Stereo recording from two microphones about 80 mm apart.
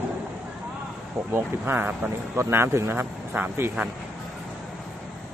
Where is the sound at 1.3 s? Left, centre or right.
Right.